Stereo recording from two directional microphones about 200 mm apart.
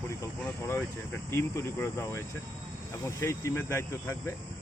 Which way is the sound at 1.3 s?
15° left (ahead or behind).